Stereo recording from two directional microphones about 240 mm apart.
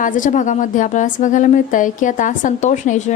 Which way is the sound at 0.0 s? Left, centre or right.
Left.